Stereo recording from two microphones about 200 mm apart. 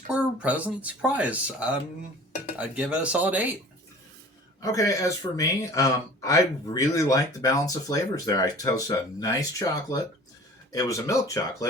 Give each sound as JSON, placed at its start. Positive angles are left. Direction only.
{"t": 0.1, "sound": "speech", "side_deg": -5}
{"t": 4.6, "sound": "speech", "side_deg": 15}